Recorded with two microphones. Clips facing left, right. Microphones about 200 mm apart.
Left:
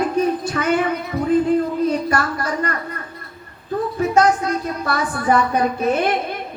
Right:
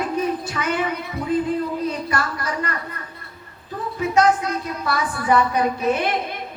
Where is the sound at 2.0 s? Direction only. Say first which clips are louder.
Left 4 dB; 45° left (ahead or behind).